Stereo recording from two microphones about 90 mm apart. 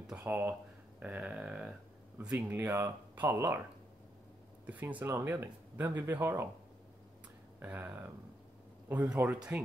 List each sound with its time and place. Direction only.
0.2 s speech: 25° right (ahead or behind)
2.3 s speech: 30° right (ahead or behind)
4.6 s speech: 20° right (ahead or behind)
7.6 s speech: 20° right (ahead or behind)